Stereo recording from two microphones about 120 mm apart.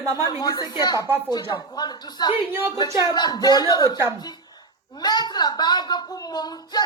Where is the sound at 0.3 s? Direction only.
30° left (ahead or behind).